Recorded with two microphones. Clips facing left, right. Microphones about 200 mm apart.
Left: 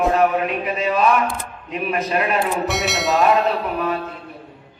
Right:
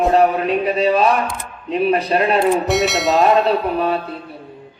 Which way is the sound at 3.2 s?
35° right (ahead or behind).